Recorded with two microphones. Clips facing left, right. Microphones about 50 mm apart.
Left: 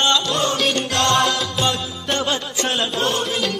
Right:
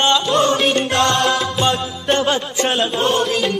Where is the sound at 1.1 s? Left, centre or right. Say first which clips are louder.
Right 2 dB; centre.